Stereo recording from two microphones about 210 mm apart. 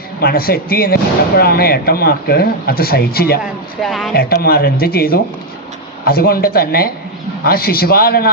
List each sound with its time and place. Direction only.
0.2 s speech: 45° left (ahead or behind)
3.8 s speech: centre (ahead or behind)
4.1 s speech: 45° left (ahead or behind)